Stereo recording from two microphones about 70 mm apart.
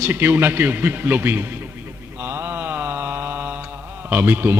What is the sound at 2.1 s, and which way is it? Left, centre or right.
Mantra, right.